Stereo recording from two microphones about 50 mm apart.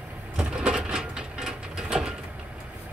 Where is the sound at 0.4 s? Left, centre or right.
Centre.